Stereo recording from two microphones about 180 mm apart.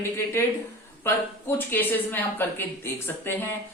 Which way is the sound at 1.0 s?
10° left (ahead or behind).